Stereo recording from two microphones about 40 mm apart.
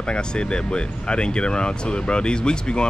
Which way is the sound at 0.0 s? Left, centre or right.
Left.